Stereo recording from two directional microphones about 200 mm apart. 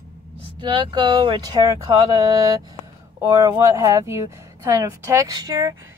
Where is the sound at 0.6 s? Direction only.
25° right (ahead or behind).